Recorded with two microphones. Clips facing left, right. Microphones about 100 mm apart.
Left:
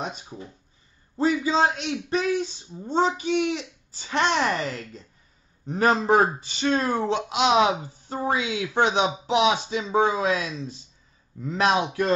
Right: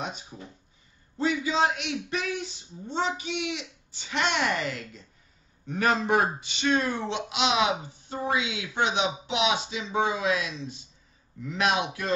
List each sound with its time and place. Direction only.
1.1 s speech: 40° left (ahead or behind)